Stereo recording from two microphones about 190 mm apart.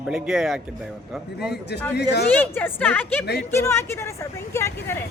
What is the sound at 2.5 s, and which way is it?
A woman's voice, 10° left (ahead or behind).